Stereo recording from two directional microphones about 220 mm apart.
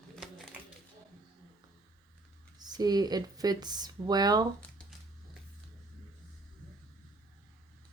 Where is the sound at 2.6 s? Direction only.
20° right (ahead or behind).